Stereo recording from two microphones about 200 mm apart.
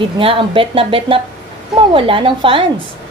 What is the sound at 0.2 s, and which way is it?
A woman's voice, 25° right (ahead or behind).